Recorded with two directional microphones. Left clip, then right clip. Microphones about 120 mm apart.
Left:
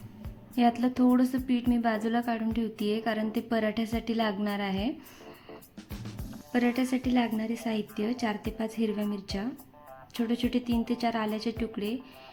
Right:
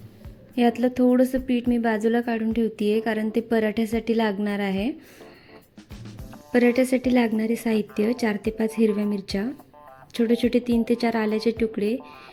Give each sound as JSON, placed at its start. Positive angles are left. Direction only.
{"t": 0.5, "sound": "a woman's voice", "side_deg": -30}
{"t": 5.9, "sound": "music", "side_deg": 0}
{"t": 6.5, "sound": "a woman's voice", "side_deg": -55}